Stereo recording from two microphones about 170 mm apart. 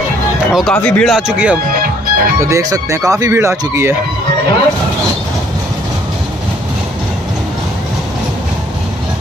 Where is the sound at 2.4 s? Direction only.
20° right (ahead or behind).